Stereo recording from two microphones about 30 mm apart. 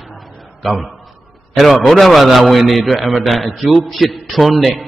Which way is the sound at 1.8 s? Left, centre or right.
Centre.